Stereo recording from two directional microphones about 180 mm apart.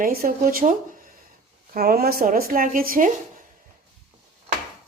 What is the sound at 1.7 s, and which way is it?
Speech, 55° right (ahead or behind).